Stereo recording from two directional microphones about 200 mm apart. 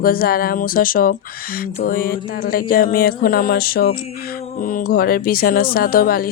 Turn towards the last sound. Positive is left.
turn(degrees=45)  # may be behind; listen again after turning